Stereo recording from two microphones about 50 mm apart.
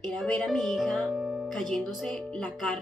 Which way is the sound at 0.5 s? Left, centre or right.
Centre.